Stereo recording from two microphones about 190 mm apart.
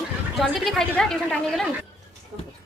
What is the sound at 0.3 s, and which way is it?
A woman's voice, centre (ahead or behind).